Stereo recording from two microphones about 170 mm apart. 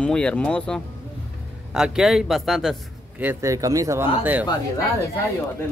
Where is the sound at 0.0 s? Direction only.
5° left (ahead or behind).